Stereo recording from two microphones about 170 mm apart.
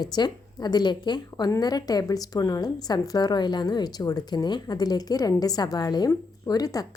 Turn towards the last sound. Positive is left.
turn(degrees=20)  # may be behind; listen again after turning